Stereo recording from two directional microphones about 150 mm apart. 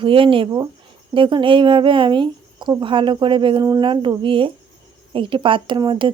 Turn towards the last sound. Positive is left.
turn(degrees=-30)  # may be behind; listen again after turning